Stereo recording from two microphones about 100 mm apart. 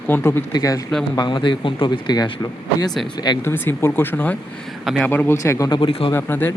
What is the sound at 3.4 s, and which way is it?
Speech, 20° left (ahead or behind).